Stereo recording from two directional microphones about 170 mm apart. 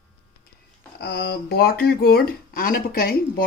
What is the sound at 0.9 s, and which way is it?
Speech, 70° left (ahead or behind).